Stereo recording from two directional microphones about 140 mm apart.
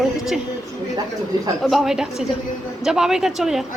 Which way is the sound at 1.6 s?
Centre (ahead or behind).